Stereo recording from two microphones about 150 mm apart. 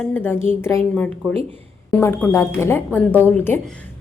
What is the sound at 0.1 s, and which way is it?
A woman's voice, 15° left (ahead or behind).